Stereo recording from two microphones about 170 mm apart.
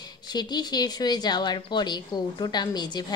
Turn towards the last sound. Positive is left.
turn(degrees=25)  # may be behind; listen again after turning